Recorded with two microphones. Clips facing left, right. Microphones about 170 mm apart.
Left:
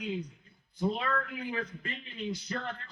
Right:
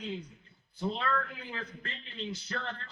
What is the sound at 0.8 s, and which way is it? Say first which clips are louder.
A man's voice: left 2 dB; 10° left (ahead or behind).